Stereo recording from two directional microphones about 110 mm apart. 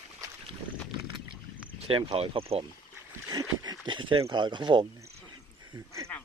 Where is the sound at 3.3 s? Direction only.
40° right (ahead or behind).